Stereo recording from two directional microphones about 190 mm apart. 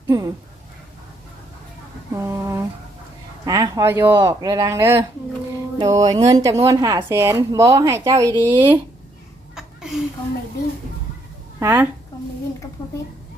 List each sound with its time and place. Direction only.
0.1 s speech: 20° right (ahead or behind)
2.1 s a sound: 15° right (ahead or behind)
3.4 s speech: 20° right (ahead or behind)
5.8 s speech: 35° right (ahead or behind)
6.1 s speech: 20° right (ahead or behind)
9.6 s a sound: centre (ahead or behind)
11.6 s speech: 10° right (ahead or behind)